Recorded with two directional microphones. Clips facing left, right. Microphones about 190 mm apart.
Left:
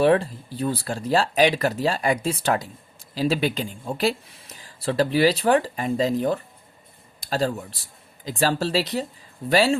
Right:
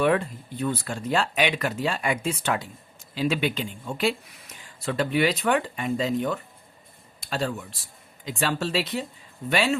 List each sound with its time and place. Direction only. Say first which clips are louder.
0.0 s speech: left 4 dB; 30° left (ahead or behind)